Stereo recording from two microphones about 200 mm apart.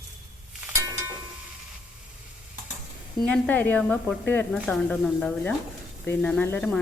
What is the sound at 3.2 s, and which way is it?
Speech, 10° left (ahead or behind).